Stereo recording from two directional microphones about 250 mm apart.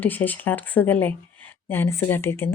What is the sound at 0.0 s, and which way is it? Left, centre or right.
A woman's voice, centre.